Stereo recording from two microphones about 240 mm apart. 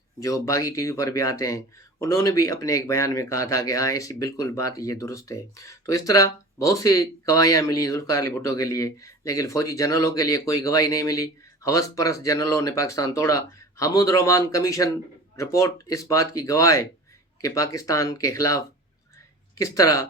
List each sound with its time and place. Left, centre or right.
0.2 s speech: centre